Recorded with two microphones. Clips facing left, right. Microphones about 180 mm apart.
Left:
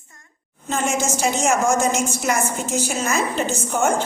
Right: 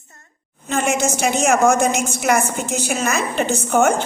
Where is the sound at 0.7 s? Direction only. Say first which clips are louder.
Right 3 dB; 65° right (ahead or behind).